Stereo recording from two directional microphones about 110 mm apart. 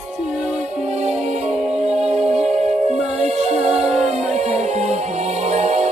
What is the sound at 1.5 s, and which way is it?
Music, 5° right (ahead or behind).